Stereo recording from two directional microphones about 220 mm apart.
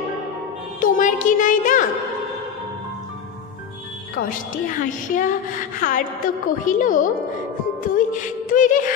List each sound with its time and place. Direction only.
0.7 s speech: 40° left (ahead or behind)
4.1 s a woman's voice: 35° left (ahead or behind)